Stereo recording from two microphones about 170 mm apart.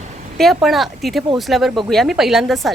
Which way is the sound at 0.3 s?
Centre (ahead or behind).